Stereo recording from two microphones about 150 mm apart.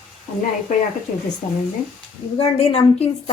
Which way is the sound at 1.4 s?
50° left (ahead or behind).